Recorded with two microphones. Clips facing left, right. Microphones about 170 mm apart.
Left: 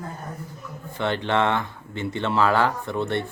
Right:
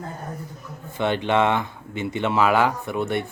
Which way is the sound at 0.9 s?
15° right (ahead or behind).